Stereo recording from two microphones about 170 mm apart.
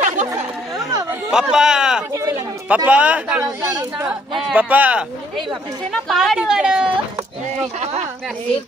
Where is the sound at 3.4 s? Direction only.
20° right (ahead or behind).